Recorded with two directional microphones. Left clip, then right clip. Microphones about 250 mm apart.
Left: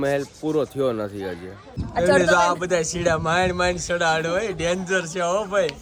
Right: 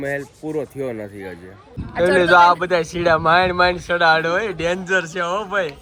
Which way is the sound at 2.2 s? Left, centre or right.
Centre.